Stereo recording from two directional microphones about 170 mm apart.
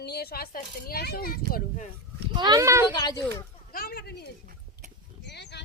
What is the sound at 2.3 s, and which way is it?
Speech, 25° right (ahead or behind).